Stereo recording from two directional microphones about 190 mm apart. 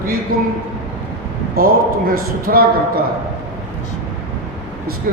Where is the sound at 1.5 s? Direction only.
50° right (ahead or behind).